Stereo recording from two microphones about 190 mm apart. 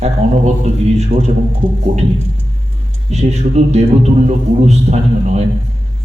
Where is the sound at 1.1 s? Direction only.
45° right (ahead or behind).